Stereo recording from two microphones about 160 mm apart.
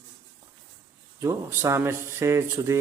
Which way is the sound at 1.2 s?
15° right (ahead or behind).